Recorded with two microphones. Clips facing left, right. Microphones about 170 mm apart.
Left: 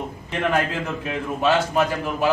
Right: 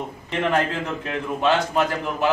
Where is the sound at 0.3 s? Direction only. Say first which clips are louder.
Even; 5° left (ahead or behind).